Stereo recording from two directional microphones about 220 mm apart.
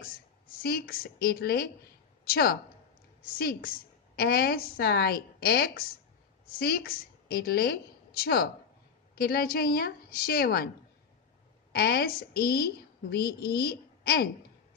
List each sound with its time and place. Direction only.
0.0 s a woman's voice: 45° left (ahead or behind)
11.7 s a woman's voice: 45° left (ahead or behind)